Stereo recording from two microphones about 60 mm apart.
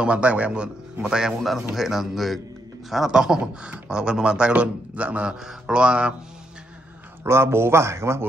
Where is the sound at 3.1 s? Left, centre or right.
Centre.